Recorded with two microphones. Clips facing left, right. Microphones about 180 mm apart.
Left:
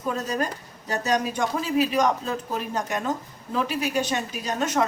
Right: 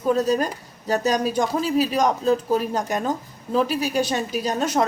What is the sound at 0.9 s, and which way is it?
Speech, 35° right (ahead or behind).